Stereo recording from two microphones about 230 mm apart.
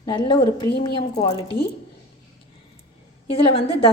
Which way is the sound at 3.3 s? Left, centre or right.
Left.